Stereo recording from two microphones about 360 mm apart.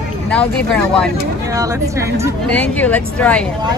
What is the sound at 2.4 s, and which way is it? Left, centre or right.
Speech, centre.